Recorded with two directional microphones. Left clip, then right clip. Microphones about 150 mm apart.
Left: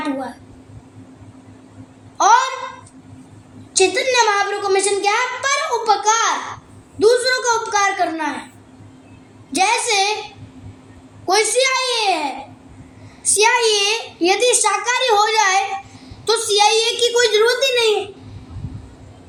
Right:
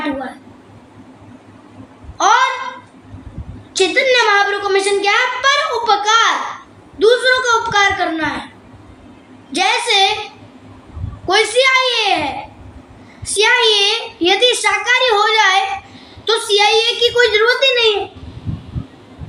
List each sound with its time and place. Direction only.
2.1 s a sound: 45° left (ahead or behind)
3.7 s a woman's voice: 50° left (ahead or behind)
9.5 s a woman's voice: 50° left (ahead or behind)
11.3 s a woman's voice: 45° left (ahead or behind)